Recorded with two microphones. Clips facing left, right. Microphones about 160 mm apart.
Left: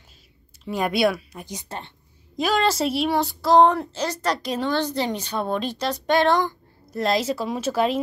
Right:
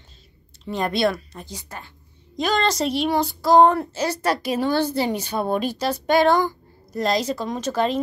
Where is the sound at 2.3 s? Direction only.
5° left (ahead or behind).